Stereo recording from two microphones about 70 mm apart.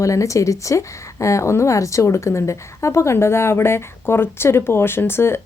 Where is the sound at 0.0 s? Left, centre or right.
Left.